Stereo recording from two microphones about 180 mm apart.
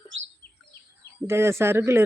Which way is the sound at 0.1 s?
90° right.